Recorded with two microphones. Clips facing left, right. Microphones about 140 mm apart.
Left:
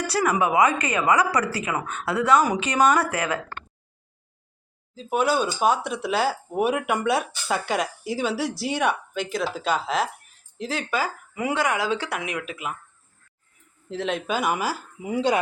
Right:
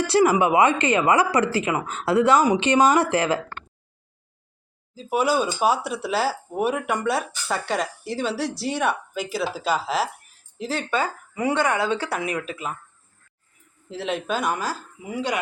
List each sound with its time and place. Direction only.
0.0 s a woman's voice: 25° right (ahead or behind)
4.9 s speech: 5° right (ahead or behind)
13.9 s speech: centre (ahead or behind)
15.0 s speech: 25° left (ahead or behind)